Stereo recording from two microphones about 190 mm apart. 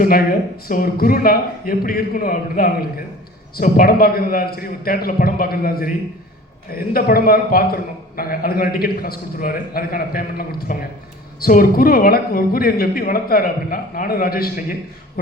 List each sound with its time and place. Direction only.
0.0 s a man's voice: 50° left (ahead or behind)